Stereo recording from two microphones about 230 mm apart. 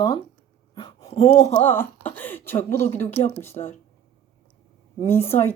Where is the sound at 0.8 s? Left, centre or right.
Centre.